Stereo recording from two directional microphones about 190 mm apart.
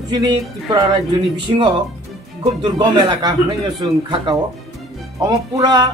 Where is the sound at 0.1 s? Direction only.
20° right (ahead or behind).